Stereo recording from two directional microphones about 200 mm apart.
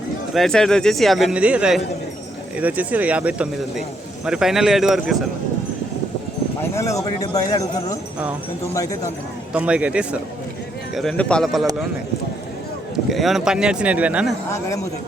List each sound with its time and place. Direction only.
0.3 s a man's voice: centre (ahead or behind)
6.6 s speech: 15° left (ahead or behind)
9.5 s a man's voice: 5° right (ahead or behind)
13.1 s a man's voice: centre (ahead or behind)